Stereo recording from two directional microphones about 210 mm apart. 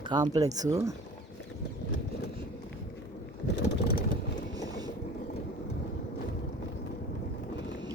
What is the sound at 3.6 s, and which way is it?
Vehicle, 45° left (ahead or behind).